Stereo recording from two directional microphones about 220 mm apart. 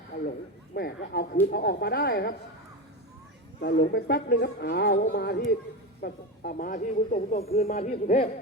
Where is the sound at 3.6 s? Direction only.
45° left (ahead or behind).